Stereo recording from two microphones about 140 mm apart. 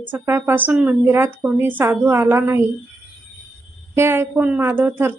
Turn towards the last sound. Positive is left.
turn(degrees=-15)  # may be behind; listen again after turning